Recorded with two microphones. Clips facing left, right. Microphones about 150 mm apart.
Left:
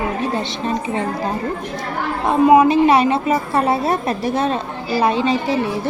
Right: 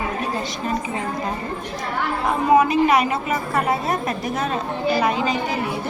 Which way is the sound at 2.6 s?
30° left (ahead or behind).